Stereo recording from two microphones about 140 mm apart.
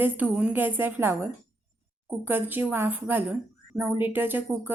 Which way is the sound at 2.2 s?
15° right (ahead or behind).